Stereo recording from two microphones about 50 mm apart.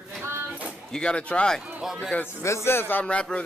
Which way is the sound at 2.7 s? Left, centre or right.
Left.